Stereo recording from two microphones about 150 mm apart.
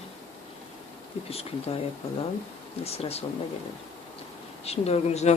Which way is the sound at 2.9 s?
40° left (ahead or behind).